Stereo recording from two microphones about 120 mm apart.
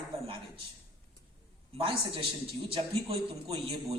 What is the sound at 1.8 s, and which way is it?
Speech, 50° right (ahead or behind).